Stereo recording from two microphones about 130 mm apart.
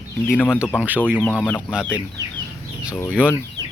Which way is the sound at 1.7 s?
5° right (ahead or behind).